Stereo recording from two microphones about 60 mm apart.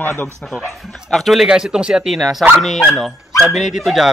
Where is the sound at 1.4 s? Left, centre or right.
Centre.